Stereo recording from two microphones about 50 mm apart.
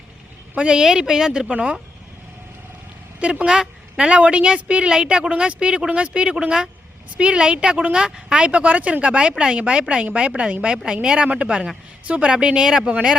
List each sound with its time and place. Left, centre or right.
0.5 s a woman's voice: right
0.8 s speech: centre
3.2 s a woman's voice: right